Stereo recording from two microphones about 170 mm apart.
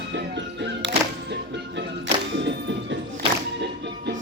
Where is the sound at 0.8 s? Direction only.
90° right.